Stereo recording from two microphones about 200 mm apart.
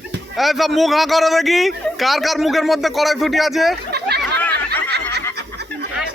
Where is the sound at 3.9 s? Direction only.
55° right (ahead or behind).